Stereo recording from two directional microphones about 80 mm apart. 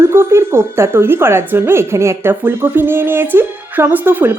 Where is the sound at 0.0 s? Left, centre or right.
Right.